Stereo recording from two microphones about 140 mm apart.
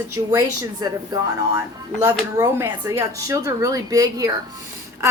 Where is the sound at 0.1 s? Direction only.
20° right (ahead or behind).